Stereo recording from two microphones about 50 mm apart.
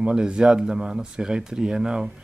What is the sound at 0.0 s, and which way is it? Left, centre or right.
Speech, centre.